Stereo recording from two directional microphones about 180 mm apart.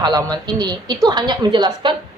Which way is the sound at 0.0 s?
20° right (ahead or behind).